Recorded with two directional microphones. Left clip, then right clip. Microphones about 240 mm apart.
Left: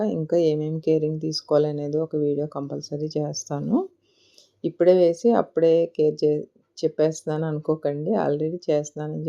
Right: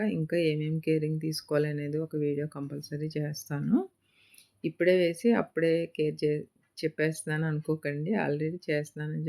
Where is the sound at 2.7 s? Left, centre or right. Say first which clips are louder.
Left 9 dB; centre.